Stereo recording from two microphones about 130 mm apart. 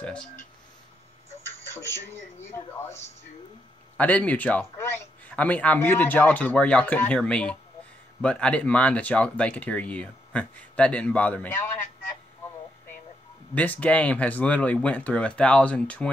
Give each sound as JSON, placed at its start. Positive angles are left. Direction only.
{"t": 0.0, "sound": "a man's voice", "side_deg": 10}
{"t": 1.7, "sound": "a man's voice", "side_deg": 20}
{"t": 13.6, "sound": "a man's voice", "side_deg": 10}